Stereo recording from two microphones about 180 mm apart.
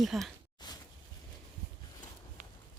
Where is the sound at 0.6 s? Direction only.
25° left (ahead or behind).